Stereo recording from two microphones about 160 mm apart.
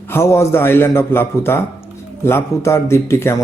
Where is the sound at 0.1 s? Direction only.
15° left (ahead or behind).